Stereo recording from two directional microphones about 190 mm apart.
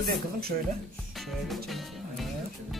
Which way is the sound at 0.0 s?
55° right (ahead or behind).